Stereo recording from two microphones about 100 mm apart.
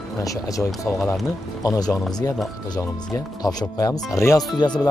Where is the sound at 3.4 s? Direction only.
40° left (ahead or behind).